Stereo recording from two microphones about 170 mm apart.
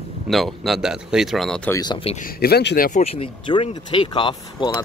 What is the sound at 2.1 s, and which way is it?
Speech, 60° left (ahead or behind).